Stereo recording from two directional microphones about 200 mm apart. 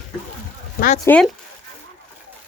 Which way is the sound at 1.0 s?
5° left (ahead or behind).